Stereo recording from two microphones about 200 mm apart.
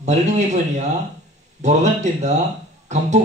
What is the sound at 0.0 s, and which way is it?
Speech, 35° right (ahead or behind).